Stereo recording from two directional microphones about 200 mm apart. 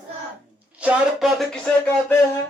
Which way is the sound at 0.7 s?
5° right (ahead or behind).